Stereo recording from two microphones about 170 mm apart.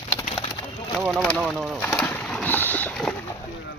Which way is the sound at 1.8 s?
10° left (ahead or behind).